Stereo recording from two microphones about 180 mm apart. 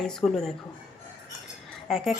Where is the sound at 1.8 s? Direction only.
Centre (ahead or behind).